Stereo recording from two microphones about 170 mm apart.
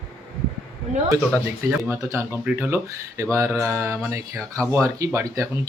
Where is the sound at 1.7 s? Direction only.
15° right (ahead or behind).